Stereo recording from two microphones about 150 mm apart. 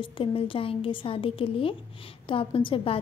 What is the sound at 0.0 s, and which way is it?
A woman's voice, 35° left (ahead or behind).